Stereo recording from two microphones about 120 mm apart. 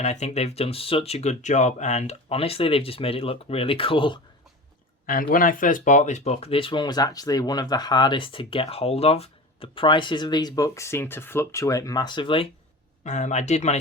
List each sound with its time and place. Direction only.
0.0 s speech: 70° left (ahead or behind); by 4.2 s 45° left (ahead or behind)
5.5 s speech: 90° left; by 12.5 s 45° left (ahead or behind)
13.1 s speech: 75° left (ahead or behind)